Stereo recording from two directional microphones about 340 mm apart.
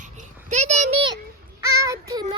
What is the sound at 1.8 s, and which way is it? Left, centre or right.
Child singing, centre.